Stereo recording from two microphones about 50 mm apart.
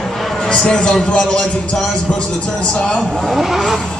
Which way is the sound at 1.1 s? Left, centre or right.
Left.